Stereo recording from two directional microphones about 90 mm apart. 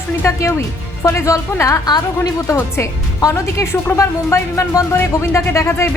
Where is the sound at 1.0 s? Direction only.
35° left (ahead or behind).